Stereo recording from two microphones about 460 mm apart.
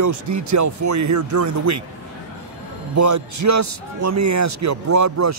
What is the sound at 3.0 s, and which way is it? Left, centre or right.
Speech, right.